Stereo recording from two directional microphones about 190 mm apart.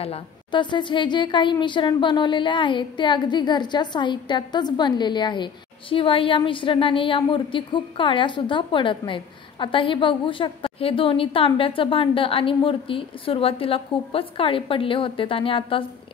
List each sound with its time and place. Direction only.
0.0 s a woman's voice: 30° left (ahead or behind)